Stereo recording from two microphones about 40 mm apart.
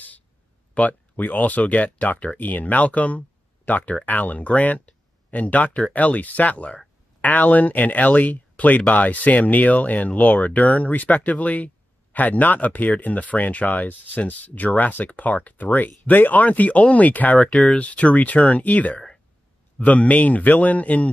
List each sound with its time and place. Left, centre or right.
0.7 s speech: left